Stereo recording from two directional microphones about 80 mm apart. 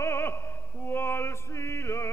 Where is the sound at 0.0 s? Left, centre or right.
Left.